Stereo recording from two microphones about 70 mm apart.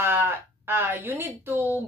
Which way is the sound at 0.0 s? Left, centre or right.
Right.